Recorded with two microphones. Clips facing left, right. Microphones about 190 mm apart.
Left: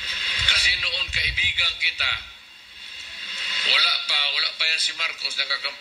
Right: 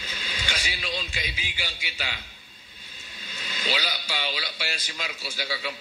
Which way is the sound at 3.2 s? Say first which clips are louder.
Right 6 dB; 45° right (ahead or behind).